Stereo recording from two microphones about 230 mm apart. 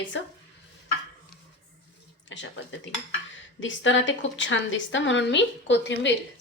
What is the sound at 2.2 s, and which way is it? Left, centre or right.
A woman's voice, left.